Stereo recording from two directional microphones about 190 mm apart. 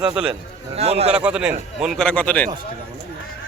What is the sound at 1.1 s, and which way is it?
A man's voice, 5° right (ahead or behind).